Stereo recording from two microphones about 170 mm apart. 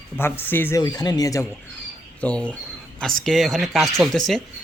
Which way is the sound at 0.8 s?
25° left (ahead or behind).